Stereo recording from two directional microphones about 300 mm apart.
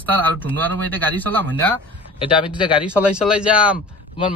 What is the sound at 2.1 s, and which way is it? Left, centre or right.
Speech, centre.